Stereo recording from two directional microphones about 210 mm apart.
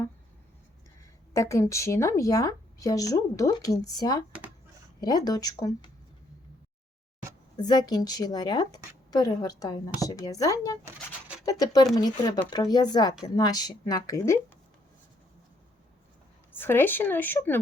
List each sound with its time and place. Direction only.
1.3 s a woman's voice: 15° left (ahead or behind)
7.5 s a woman's voice: 20° left (ahead or behind)
16.6 s a woman's voice: 10° left (ahead or behind)